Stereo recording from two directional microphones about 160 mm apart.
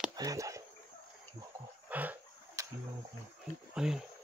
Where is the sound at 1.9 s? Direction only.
10° right (ahead or behind).